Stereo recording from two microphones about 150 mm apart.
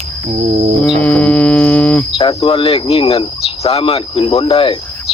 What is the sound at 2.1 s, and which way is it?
Speech, 35° left (ahead or behind).